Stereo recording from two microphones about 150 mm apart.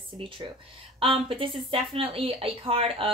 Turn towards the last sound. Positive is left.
turn(degrees=-35)  # may be behind; listen again after turning